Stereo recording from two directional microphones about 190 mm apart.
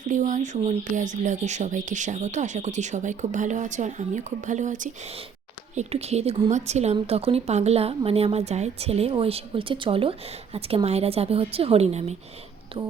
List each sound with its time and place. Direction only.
0.0 s speech: 40° right (ahead or behind)